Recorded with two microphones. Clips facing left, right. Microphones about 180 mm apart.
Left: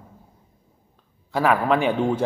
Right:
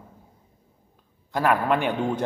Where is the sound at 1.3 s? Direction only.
Centre (ahead or behind).